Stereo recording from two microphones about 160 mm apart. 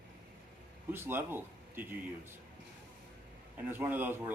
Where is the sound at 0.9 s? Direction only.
15° right (ahead or behind).